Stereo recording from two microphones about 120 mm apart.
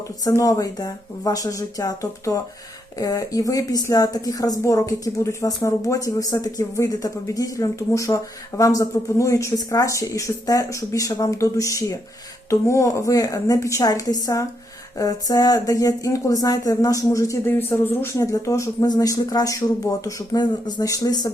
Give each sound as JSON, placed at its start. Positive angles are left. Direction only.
{"t": 0.3, "sound": "speech", "side_deg": 25}